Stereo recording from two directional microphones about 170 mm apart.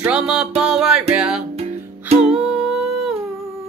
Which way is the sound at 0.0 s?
5° right (ahead or behind).